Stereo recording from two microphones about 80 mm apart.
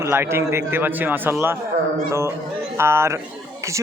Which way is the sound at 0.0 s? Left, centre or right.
Right.